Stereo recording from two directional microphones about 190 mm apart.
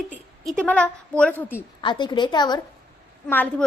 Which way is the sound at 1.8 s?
25° left (ahead or behind).